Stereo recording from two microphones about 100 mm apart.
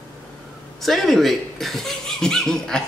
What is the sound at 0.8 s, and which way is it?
Speech, centre (ahead or behind).